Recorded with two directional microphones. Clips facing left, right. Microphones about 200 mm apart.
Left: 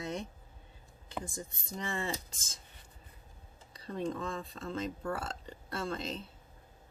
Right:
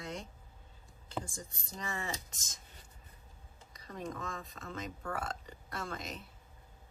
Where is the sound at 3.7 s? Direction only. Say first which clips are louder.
Left 6 dB; 30° left (ahead or behind).